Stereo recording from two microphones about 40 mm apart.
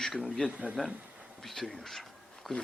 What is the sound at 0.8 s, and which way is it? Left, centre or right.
A man's voice, centre.